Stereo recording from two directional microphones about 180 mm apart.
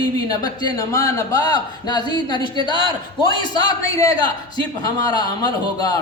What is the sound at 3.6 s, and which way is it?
Speech, 20° left (ahead or behind).